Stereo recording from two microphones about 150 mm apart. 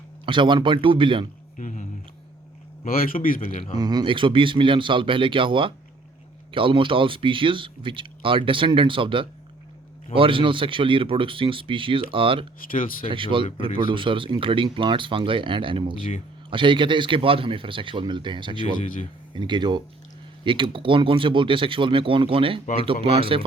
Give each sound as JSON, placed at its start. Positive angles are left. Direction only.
{"t": 0.3, "sound": "speech", "side_deg": -30}
{"t": 1.5, "sound": "speech", "side_deg": 55}
{"t": 2.8, "sound": "speech", "side_deg": 70}
{"t": 3.4, "sound": "speech", "side_deg": 40}
{"t": 3.8, "sound": "speech", "side_deg": -25}
{"t": 16.0, "sound": "speech", "side_deg": 40}
{"t": 16.5, "sound": "speech", "side_deg": -35}